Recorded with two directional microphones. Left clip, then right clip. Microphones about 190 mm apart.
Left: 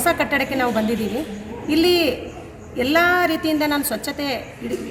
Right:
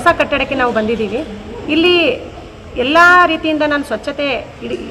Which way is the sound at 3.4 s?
15° right (ahead or behind).